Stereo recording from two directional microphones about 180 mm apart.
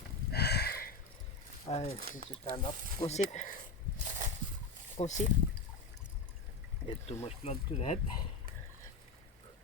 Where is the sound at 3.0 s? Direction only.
40° left (ahead or behind).